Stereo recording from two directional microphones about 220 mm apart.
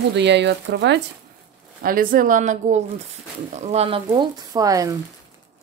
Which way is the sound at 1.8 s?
40° right (ahead or behind).